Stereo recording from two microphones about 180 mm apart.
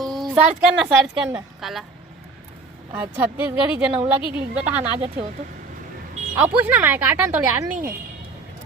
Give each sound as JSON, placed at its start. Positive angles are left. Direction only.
{"t": 0.0, "sound": "a woman's voice", "side_deg": 0}
{"t": 2.9, "sound": "speech", "side_deg": -10}
{"t": 4.8, "sound": "speech", "side_deg": -35}
{"t": 6.6, "sound": "speech", "side_deg": -10}